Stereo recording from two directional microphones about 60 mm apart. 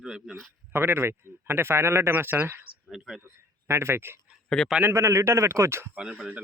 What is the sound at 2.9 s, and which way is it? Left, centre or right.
Speech, centre.